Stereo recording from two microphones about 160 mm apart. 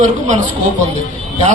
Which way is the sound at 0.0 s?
50° right (ahead or behind).